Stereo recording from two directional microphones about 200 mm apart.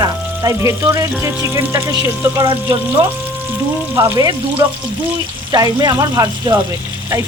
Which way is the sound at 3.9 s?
15° right (ahead or behind).